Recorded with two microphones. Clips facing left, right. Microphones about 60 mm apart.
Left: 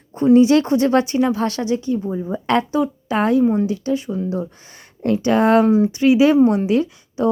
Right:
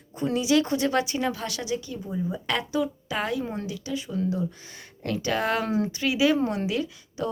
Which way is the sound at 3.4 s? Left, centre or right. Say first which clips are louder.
Left 15 dB; centre.